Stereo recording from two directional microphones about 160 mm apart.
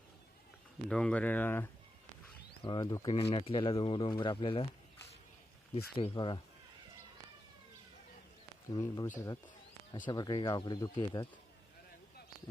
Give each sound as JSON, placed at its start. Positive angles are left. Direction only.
{"t": 0.9, "sound": "speech", "side_deg": 5}
{"t": 2.6, "sound": "speech", "side_deg": 25}
{"t": 3.2, "sound": "speech", "side_deg": 35}
{"t": 6.0, "sound": "speech", "side_deg": 35}
{"t": 8.7, "sound": "speech", "side_deg": 25}